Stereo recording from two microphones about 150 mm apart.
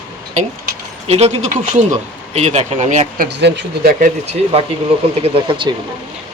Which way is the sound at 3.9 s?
65° right (ahead or behind).